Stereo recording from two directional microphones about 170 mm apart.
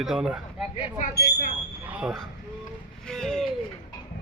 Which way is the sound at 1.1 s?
70° left (ahead or behind).